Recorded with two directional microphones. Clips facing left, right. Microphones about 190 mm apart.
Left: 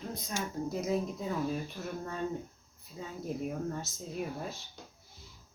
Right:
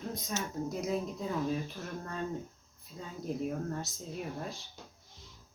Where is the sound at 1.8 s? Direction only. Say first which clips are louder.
Left 3 dB; 5° right (ahead or behind).